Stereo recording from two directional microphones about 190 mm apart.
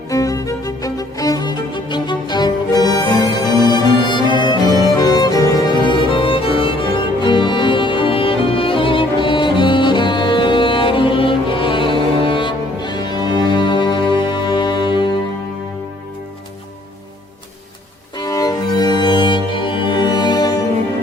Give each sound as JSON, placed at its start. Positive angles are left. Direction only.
{"t": 0.1, "sound": "music", "side_deg": 20}
{"t": 18.2, "sound": "music", "side_deg": 20}